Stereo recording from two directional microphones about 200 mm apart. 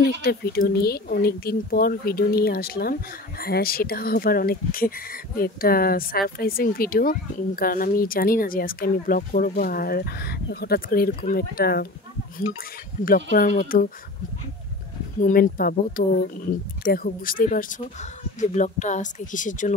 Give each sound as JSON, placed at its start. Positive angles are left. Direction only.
{"t": 0.0, "sound": "speech", "side_deg": 50}
{"t": 13.0, "sound": "speech", "side_deg": 45}
{"t": 15.1, "sound": "speech", "side_deg": 40}